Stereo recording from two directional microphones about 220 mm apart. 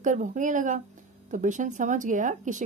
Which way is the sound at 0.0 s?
35° right (ahead or behind).